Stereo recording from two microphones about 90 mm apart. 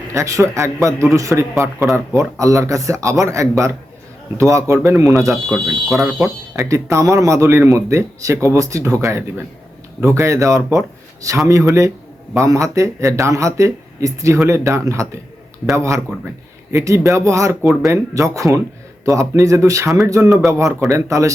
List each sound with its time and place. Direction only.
0.1 s speech: 35° right (ahead or behind)
5.5 s speech: centre (ahead or behind)
6.6 s speech: 35° right (ahead or behind)